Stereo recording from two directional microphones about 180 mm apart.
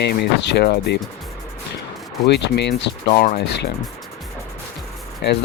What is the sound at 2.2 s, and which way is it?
Speech, 70° left (ahead or behind).